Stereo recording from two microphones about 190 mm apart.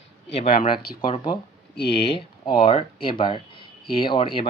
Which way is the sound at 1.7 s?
60° left (ahead or behind).